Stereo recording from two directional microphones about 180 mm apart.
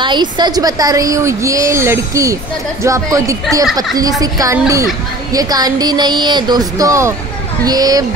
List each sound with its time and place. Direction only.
0.0 s a woman's voice: 25° right (ahead or behind)